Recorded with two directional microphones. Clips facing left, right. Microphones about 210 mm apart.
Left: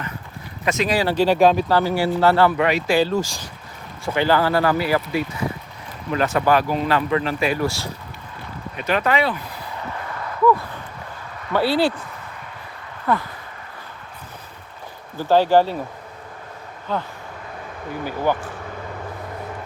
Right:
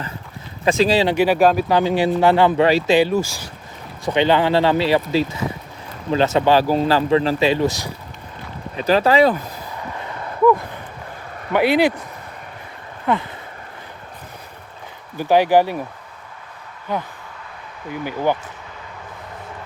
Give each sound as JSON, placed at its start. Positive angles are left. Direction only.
{"t": 0.6, "sound": "speech", "side_deg": -30}
{"t": 1.1, "sound": "speech", "side_deg": -10}
{"t": 1.6, "sound": "speech", "side_deg": -20}
{"t": 2.6, "sound": "speech", "side_deg": -30}
{"t": 4.0, "sound": "speech", "side_deg": -20}
{"t": 8.7, "sound": "speech", "side_deg": -35}
{"t": 11.5, "sound": "speech", "side_deg": -20}
{"t": 13.1, "sound": "speech", "side_deg": -20}
{"t": 15.2, "sound": "speech", "side_deg": -15}
{"t": 16.9, "sound": "speech", "side_deg": -15}